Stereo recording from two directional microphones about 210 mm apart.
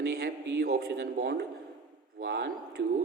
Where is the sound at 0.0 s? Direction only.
50° right (ahead or behind).